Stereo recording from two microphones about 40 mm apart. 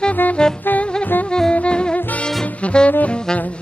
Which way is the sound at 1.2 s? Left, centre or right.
Centre.